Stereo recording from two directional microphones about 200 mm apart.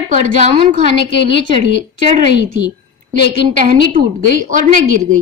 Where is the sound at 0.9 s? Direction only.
60° left (ahead or behind).